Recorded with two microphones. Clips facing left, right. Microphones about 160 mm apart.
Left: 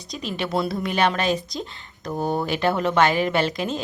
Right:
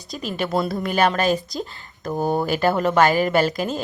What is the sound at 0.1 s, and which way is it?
A woman's voice, centre (ahead or behind).